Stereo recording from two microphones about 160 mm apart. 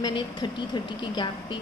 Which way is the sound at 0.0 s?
30° left (ahead or behind).